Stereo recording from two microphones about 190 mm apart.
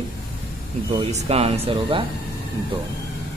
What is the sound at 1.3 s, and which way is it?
Speech, 30° right (ahead or behind).